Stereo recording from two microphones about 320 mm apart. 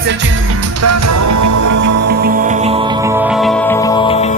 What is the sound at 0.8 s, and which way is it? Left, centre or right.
Music, right.